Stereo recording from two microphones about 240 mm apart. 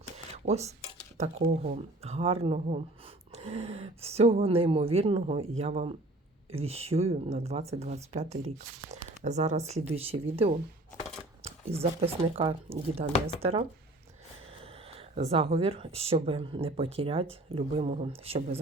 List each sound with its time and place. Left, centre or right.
0.4 s speech: right
14.6 s a sound: right
15.5 s speech: right